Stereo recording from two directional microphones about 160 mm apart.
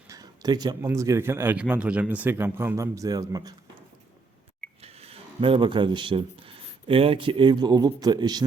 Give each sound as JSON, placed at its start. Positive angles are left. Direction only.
{"t": 0.1, "sound": "speech", "side_deg": -25}
{"t": 4.8, "sound": "speech", "side_deg": -40}